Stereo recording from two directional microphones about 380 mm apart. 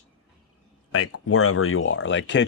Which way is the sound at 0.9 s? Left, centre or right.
Left.